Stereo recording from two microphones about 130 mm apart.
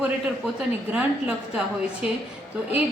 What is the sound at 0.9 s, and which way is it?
A woman's voice, 5° right (ahead or behind).